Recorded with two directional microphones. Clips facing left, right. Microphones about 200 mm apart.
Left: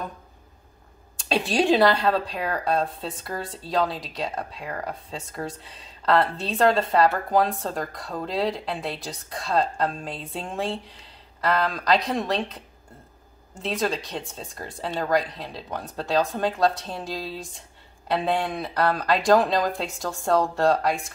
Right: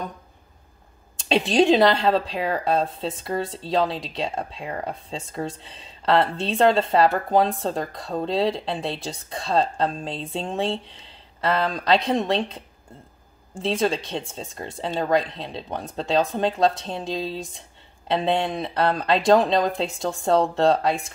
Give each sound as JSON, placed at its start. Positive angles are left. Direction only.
{"t": 1.1, "sound": "speech", "side_deg": -20}